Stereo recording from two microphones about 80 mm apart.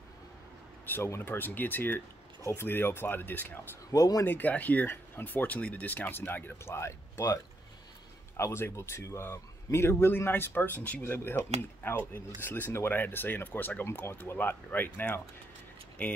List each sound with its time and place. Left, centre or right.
0.8 s speech: left
3.9 s speech: left
4.3 s speech: left
8.4 s a man's voice: left